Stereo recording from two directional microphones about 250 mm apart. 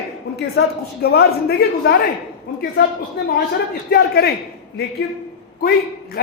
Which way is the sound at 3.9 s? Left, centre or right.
Left.